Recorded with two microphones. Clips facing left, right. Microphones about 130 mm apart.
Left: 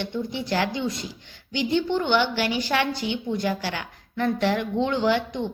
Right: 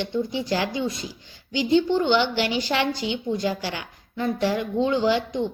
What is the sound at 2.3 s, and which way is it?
A woman's voice, 45° left (ahead or behind).